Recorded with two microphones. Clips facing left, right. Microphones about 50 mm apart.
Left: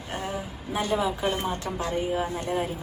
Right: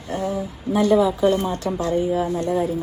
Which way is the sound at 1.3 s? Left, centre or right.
Left.